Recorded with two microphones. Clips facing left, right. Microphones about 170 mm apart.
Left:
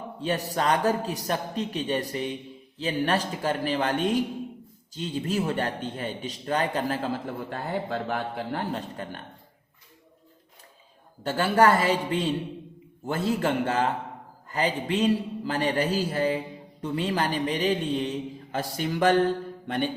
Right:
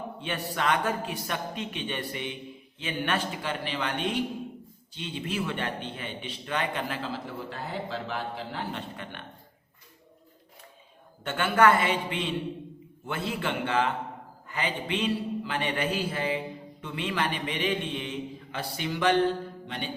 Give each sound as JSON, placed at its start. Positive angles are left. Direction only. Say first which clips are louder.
{"t": 0.2, "sound": "a man's voice", "louder": "left 5 dB", "side_deg": 40}
{"t": 11.2, "sound": "a man's voice", "louder": "left 2 dB", "side_deg": 35}